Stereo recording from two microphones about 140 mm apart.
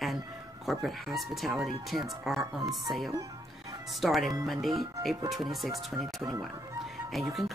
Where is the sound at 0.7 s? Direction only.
Centre (ahead or behind).